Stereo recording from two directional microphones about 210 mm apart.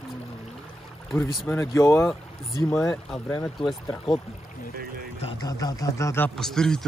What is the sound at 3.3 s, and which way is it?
Speech, 15° left (ahead or behind).